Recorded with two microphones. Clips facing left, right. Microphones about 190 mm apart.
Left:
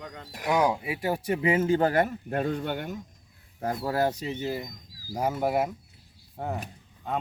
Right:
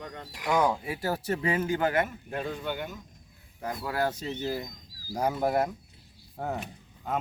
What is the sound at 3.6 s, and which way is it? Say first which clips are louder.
Speech: left 4 dB; 30° left (ahead or behind).